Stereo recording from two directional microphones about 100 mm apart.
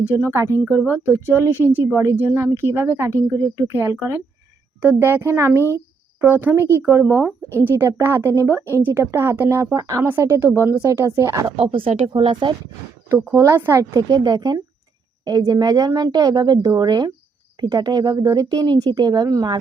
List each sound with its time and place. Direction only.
0.1 s speech: 25° right (ahead or behind)
11.5 s speech: 70° right (ahead or behind)
13.3 s speech: 25° right (ahead or behind)
13.9 s speech: 45° right (ahead or behind)